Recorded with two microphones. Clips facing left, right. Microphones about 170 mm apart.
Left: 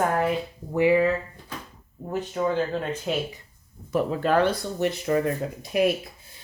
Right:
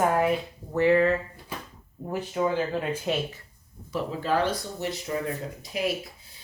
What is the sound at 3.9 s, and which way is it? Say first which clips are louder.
Speech: left 4 dB; 55° left (ahead or behind).